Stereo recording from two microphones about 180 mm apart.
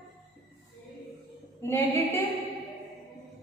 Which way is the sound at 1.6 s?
15° left (ahead or behind).